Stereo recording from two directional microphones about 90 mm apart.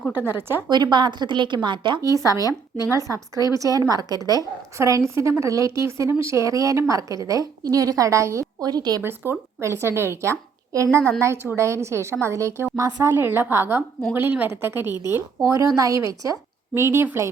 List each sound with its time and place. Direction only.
0.2 s a woman's voice: 25° right (ahead or behind)
0.7 s a woman's voice: 55° right (ahead or behind)
2.0 s a woman's voice: 40° right (ahead or behind)
4.8 s a woman's voice: 30° right (ahead or behind)
9.0 s a woman's voice: 25° right (ahead or behind)
13.1 s a woman's voice: 25° right (ahead or behind)
14.9 s speech: 45° left (ahead or behind)
15.4 s a woman's voice: 40° right (ahead or behind)